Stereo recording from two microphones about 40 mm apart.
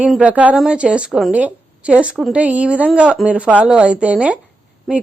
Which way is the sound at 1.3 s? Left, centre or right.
Right.